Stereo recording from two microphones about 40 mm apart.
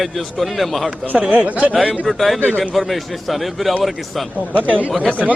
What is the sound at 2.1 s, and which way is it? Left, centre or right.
Speech, centre.